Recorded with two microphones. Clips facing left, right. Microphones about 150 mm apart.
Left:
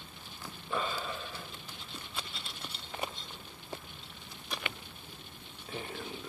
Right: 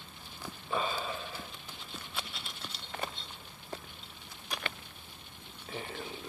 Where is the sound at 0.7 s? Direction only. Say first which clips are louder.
Right 1 dB; 15° right (ahead or behind).